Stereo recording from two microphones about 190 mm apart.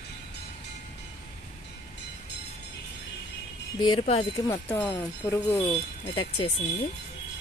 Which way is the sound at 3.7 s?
25° left (ahead or behind).